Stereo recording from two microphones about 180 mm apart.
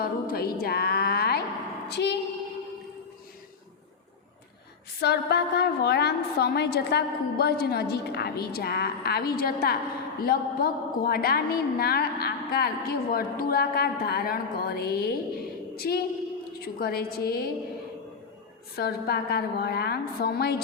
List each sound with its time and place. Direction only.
0.0 s music: 55° left (ahead or behind)
1.9 s a woman's voice: 70° left (ahead or behind)
4.9 s a woman's voice: 65° left (ahead or behind)
18.8 s a woman's voice: 60° left (ahead or behind)